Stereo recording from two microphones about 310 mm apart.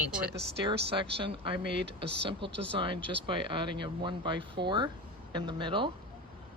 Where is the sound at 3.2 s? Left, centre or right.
Centre.